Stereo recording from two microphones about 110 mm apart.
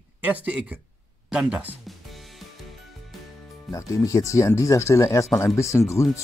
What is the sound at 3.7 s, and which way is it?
Speech, 30° left (ahead or behind).